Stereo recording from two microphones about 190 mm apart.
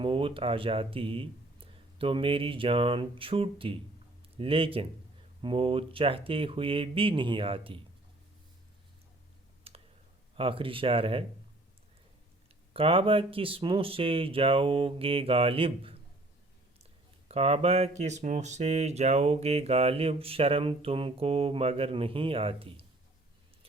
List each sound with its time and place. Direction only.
0.0 s speech: 30° right (ahead or behind)
9.7 s clicking: 30° right (ahead or behind)
10.3 s speech: 30° right (ahead or behind)
12.7 s speech: 30° right (ahead or behind)
17.2 s speech: 30° right (ahead or behind)